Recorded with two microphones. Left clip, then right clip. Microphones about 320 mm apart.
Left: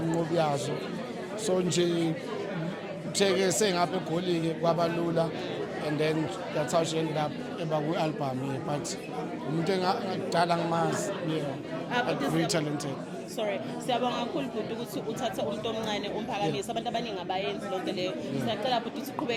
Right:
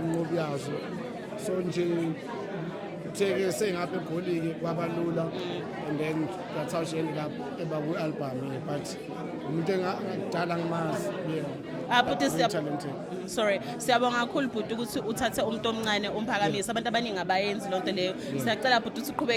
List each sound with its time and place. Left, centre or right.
0.3 s a man's voice: centre
3.2 s speech: centre
6.7 s speech: centre
9.6 s speech: centre
11.9 s speech: right